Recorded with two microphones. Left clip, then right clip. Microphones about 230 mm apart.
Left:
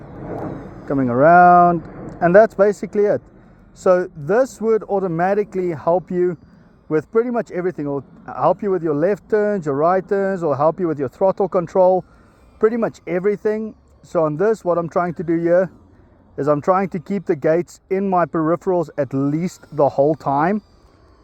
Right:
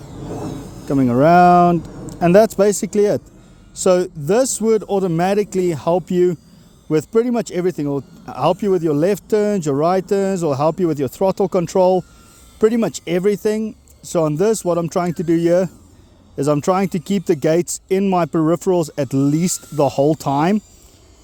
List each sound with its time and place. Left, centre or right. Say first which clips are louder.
0.2 s vehicle: even; right
0.5 s a sound: right 1 dB; right
0.9 s speech: even; right